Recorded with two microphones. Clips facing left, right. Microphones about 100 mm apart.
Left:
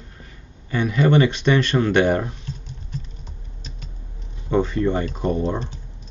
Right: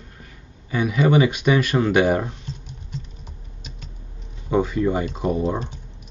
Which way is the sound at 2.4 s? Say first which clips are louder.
Left 1 dB; 20° right (ahead or behind).